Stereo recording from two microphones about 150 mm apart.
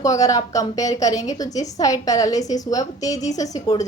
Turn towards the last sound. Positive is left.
turn(degrees=25)  # may be behind; listen again after turning